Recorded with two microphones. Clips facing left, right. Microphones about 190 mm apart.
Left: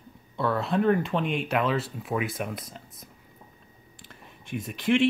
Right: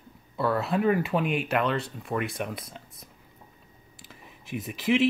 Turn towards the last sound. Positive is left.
turn(degrees=0)  # may be behind; listen again after turning